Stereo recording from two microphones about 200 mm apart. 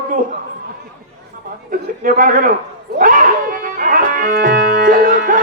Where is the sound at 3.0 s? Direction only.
45° right (ahead or behind).